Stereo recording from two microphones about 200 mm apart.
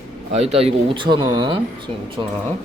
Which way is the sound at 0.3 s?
30° right (ahead or behind).